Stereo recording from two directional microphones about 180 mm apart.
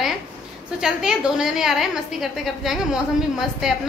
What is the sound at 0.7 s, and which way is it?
A woman's voice, 5° right (ahead or behind).